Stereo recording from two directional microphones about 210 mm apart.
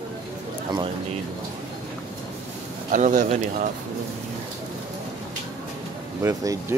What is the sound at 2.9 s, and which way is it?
Speech, 40° right (ahead or behind).